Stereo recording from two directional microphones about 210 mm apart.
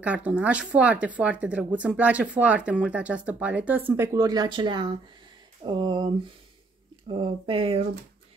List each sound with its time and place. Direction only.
0.0 s speech: 5° right (ahead or behind)
7.1 s speech: 25° right (ahead or behind)